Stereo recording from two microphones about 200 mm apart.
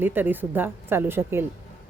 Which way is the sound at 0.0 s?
10° right (ahead or behind).